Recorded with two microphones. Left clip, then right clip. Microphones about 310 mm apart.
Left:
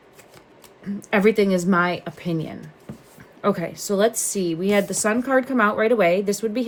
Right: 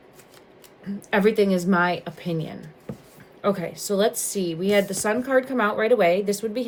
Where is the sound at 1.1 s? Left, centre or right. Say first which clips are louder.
Left 2 dB; centre.